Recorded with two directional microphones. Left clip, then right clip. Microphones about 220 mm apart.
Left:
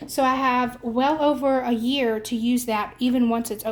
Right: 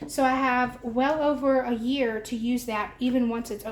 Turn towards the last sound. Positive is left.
turn(degrees=45)  # may be behind; listen again after turning